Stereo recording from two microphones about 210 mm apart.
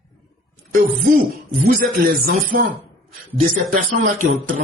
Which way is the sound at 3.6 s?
40° right (ahead or behind).